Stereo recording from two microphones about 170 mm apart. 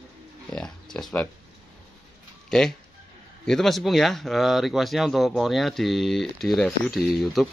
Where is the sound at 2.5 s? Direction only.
5° left (ahead or behind).